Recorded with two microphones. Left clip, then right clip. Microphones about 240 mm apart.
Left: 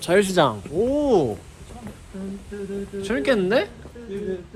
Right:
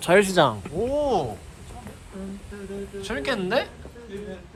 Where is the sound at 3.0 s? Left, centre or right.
Centre.